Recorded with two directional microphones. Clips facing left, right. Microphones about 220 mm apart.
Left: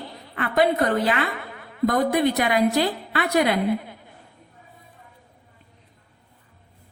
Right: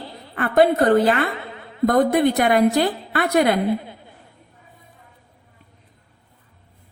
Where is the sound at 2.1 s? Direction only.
50° right (ahead or behind).